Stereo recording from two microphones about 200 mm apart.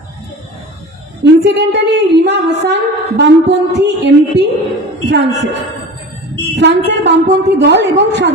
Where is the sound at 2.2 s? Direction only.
60° right (ahead or behind).